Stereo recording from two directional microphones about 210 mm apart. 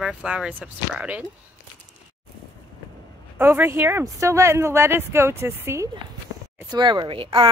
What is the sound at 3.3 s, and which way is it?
A woman's voice, 10° right (ahead or behind).